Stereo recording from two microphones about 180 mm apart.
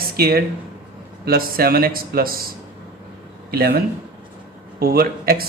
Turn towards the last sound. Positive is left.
turn(degrees=-55)  # may be behind; listen again after turning